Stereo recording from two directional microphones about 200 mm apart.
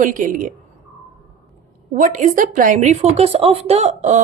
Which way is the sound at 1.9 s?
40° right (ahead or behind).